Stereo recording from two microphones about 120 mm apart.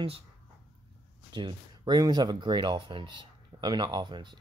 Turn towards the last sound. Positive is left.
turn(degrees=-40)  # may be behind; listen again after turning